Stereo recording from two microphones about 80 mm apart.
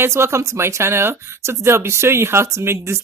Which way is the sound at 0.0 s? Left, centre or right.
Right.